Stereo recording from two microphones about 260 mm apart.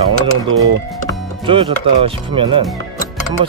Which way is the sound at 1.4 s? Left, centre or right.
Centre.